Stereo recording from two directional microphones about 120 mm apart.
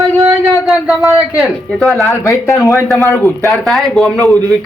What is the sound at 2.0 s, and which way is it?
Speech, 25° left (ahead or behind).